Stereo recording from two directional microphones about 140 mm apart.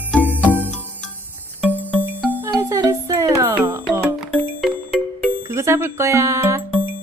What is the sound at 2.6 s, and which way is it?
Music, 25° right (ahead or behind).